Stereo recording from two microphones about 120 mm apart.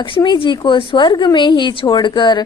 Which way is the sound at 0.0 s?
45° left (ahead or behind).